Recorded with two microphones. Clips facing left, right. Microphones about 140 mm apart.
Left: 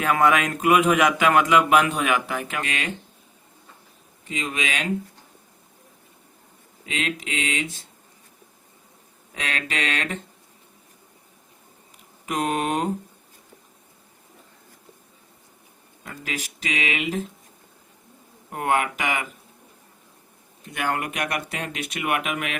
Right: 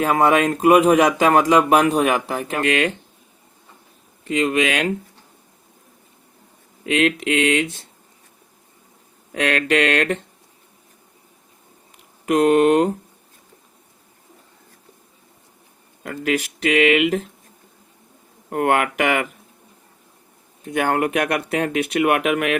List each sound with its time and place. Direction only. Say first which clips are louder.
0.0 s speech: right 4 dB; 35° right (ahead or behind)
2.6 s speech: right 11 dB; 65° right (ahead or behind)
4.3 s speech: right 10 dB; 60° right (ahead or behind)
6.8 s speech: right 10 dB; 60° right (ahead or behind)
9.3 s speech: right 11 dB; 60° right (ahead or behind)
12.3 s speech: right 10 dB; 70° right (ahead or behind)
16.0 s speech: right 11 dB; 60° right (ahead or behind)
18.5 s speech: right 5 dB; 60° right (ahead or behind)
20.7 s speech: right 7 dB; 50° right (ahead or behind)